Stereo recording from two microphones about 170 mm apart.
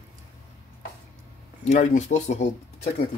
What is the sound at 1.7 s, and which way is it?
Speech, 45° left (ahead or behind).